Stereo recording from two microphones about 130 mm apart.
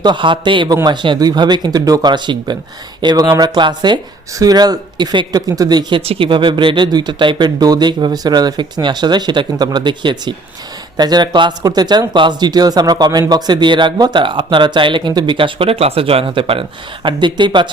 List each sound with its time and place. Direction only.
0.0 s speech: 35° right (ahead or behind)